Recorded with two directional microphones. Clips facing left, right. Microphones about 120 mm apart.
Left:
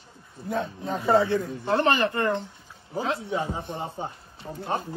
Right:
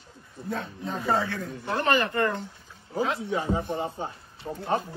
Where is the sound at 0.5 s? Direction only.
20° left (ahead or behind).